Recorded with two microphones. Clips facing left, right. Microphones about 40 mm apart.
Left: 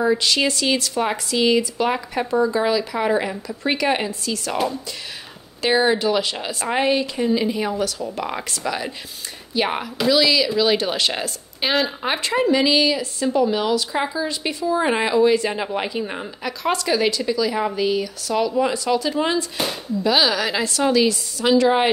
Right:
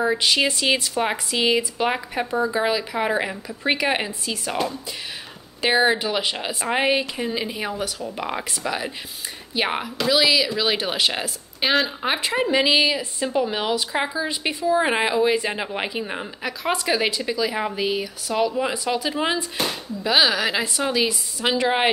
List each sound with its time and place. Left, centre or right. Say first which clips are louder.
0.0 s speech: left 1 dB; centre
5.6 s speech: left 1 dB; centre
12.4 s speech: left 1 dB; centre
19.5 s speech: left 2 dB; centre